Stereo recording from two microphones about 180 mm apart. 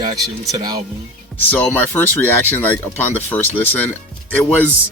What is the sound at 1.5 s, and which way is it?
Speech, 10° left (ahead or behind).